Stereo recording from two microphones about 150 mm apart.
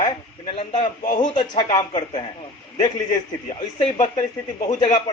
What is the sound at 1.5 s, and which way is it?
A man's voice, 30° left (ahead or behind).